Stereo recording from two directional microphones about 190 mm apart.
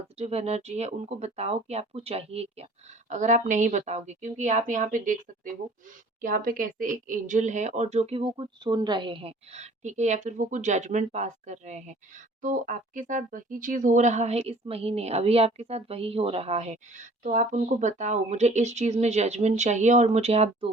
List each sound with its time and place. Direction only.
0.2 s a woman's voice: 35° right (ahead or behind)